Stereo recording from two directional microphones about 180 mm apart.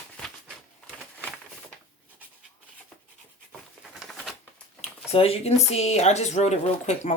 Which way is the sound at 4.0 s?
Centre (ahead or behind).